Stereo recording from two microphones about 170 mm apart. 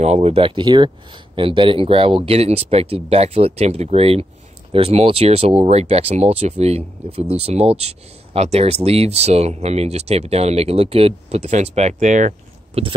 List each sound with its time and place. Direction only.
0.0 s speech: 40° right (ahead or behind)